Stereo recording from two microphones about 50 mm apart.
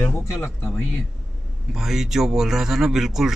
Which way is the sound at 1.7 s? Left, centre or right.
Centre.